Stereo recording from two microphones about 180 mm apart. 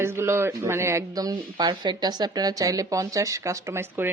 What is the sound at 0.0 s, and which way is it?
Speech, 15° right (ahead or behind).